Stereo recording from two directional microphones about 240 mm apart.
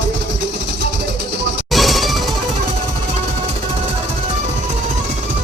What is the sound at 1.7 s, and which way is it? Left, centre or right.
Music, centre.